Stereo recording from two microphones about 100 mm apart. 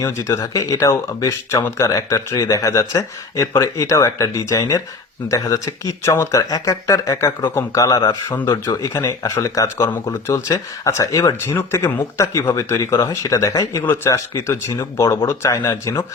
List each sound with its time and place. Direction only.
0.0 s speech: 30° left (ahead or behind)